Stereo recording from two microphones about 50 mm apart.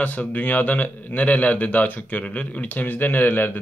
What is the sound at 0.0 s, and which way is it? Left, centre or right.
A man's voice, left.